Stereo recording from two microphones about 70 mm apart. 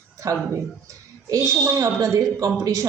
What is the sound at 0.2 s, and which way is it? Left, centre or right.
A woman's voice, right.